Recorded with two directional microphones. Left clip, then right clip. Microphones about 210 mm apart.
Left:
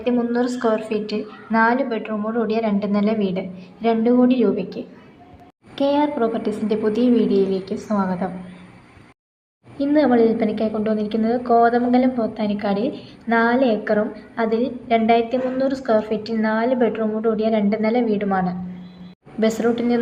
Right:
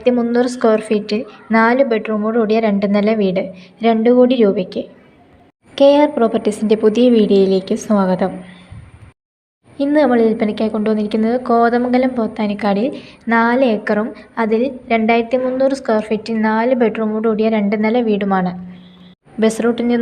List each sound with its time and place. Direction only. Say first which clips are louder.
0.0 s a woman's voice: right 6 dB; 35° right (ahead or behind)
9.7 s a woman's voice: right 3 dB; 35° right (ahead or behind)